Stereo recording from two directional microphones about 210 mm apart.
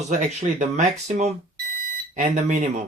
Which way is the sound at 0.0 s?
35° right (ahead or behind).